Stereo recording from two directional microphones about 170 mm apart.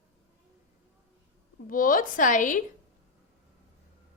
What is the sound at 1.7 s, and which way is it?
Speech, 55° left (ahead or behind).